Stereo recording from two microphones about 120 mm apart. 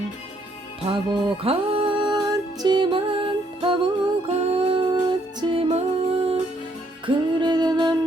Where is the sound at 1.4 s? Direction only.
55° right (ahead or behind).